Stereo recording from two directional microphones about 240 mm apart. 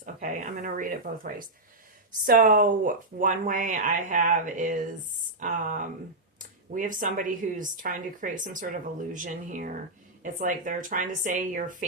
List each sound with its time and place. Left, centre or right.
0.0 s speech: right